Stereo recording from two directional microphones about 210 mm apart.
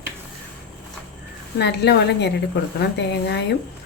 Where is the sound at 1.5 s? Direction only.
55° left (ahead or behind).